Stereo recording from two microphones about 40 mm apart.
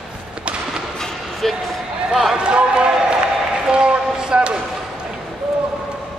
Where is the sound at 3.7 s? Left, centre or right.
Right.